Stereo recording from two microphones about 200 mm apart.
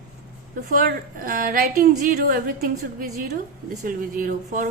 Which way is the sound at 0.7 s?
45° right (ahead or behind).